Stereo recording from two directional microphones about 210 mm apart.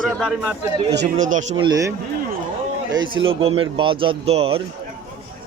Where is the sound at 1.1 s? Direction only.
35° right (ahead or behind).